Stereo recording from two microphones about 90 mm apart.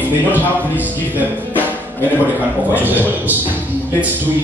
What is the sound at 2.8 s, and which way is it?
Speech, 20° right (ahead or behind).